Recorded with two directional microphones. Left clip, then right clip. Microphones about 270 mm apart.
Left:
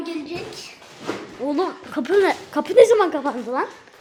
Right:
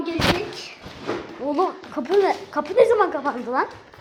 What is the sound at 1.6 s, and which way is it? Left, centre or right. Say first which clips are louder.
A woman's voice: right 3 dB; left.